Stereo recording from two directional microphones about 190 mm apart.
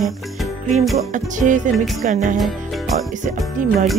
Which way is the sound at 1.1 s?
40° right (ahead or behind).